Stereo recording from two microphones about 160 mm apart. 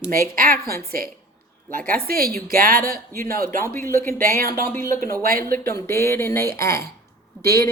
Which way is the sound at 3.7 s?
15° left (ahead or behind).